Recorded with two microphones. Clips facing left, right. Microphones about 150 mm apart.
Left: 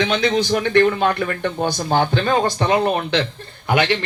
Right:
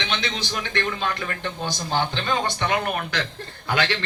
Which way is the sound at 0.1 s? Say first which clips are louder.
Left 11 dB; 40° left (ahead or behind).